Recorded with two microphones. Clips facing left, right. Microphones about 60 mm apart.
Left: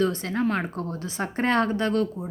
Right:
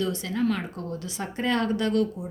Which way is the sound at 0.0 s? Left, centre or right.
Left.